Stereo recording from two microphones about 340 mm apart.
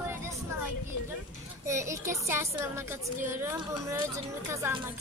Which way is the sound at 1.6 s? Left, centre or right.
Centre.